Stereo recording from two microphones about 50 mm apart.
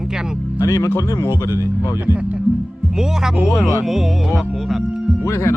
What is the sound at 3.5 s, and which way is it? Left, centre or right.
Speech, left.